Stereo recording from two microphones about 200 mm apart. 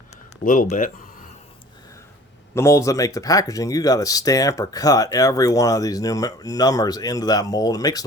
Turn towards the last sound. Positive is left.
turn(degrees=20)  # may be behind; listen again after turning